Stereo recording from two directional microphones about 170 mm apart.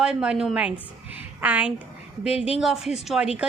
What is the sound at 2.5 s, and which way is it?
Speech, 5° right (ahead or behind).